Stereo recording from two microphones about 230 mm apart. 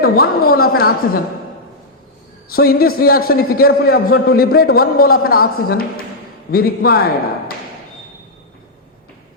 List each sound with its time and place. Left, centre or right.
0.0 s a man's voice: left
2.5 s a man's voice: left